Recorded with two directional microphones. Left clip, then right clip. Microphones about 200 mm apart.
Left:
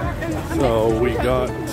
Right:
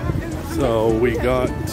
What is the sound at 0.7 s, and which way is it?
Speech, 30° right (ahead or behind).